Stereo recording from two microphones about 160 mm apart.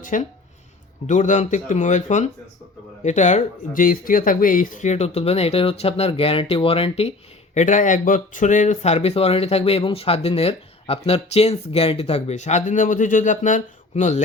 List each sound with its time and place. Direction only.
0.0 s speech: 55° left (ahead or behind); by 7.1 s 35° left (ahead or behind)
7.5 s speech: 50° left (ahead or behind)